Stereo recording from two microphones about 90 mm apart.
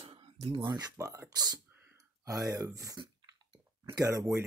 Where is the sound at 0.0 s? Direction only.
90° right.